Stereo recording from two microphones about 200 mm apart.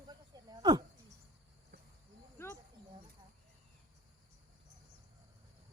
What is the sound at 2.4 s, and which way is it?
Speech, 10° left (ahead or behind).